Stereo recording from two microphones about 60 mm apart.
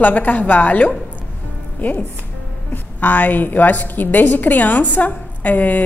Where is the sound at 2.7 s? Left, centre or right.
Left.